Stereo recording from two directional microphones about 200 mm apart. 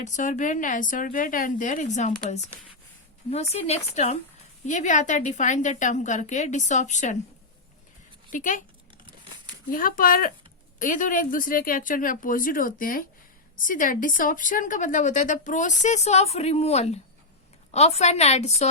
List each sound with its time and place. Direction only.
0.0 s speech: 40° left (ahead or behind)
3.2 s speech: 30° left (ahead or behind)
8.3 s speech: 40° left (ahead or behind)
9.7 s a woman's voice: 45° left (ahead or behind)